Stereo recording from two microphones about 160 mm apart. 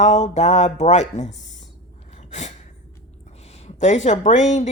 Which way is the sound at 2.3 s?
45° left (ahead or behind).